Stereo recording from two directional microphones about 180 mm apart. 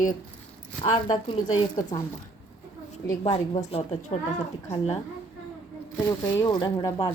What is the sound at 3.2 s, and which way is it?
Speech, 35° left (ahead or behind).